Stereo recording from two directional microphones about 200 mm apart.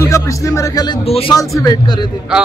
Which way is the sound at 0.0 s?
15° left (ahead or behind).